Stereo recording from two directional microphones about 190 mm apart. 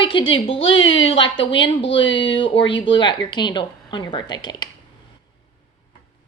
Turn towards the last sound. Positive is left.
turn(degrees=20)  # may be behind; listen again after turning